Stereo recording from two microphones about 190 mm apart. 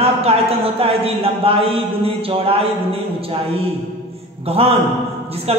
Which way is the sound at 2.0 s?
30° right (ahead or behind).